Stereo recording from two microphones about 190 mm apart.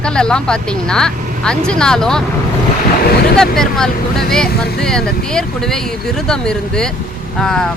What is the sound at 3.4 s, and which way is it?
Speech, centre (ahead or behind).